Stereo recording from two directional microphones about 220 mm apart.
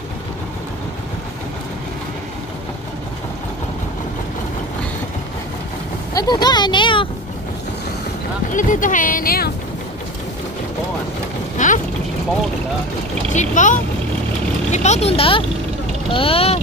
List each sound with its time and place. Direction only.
6.1 s speech: 20° left (ahead or behind)
8.5 s speech: 35° left (ahead or behind)
11.5 s vehicle: 35° left (ahead or behind)
13.3 s speech: 35° left (ahead or behind)